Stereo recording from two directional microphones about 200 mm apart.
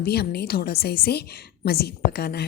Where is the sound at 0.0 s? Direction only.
50° left (ahead or behind).